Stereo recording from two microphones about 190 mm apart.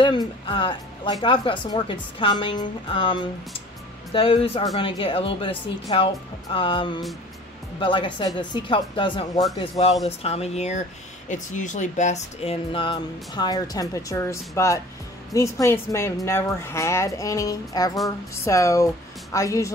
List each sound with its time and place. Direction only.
0.0 s speech: 25° left (ahead or behind)